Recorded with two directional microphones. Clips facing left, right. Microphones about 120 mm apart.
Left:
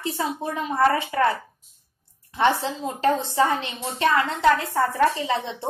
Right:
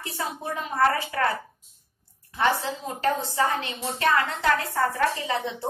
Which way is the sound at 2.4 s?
25° left (ahead or behind).